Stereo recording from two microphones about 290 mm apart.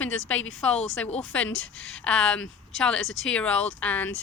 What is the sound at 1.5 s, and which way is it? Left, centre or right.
Speech, left.